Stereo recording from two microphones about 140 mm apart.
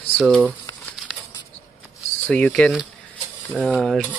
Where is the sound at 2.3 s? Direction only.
5° left (ahead or behind).